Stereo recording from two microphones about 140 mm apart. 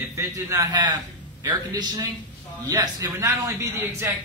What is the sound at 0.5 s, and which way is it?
A man's voice, 25° right (ahead or behind).